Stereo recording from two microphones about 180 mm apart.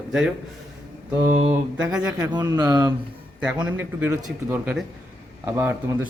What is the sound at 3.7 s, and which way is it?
Speech, 10° right (ahead or behind).